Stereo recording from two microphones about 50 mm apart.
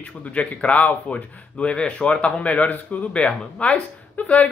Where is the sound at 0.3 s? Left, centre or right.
Left.